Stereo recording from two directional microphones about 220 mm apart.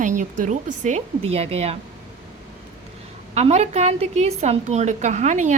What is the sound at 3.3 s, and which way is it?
A woman's voice, 30° right (ahead or behind).